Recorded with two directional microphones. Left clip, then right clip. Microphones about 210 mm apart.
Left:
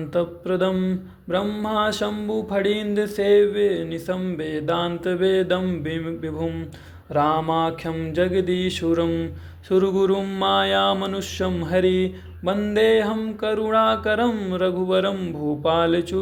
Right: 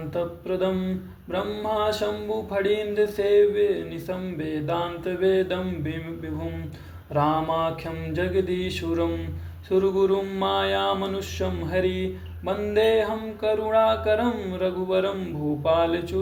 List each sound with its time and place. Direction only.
0.1 s mantra: 50° left (ahead or behind)